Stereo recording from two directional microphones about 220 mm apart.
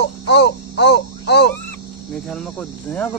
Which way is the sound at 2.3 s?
5° left (ahead or behind).